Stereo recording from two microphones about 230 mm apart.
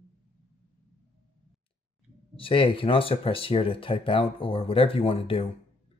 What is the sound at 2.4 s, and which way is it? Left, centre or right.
Speech, left.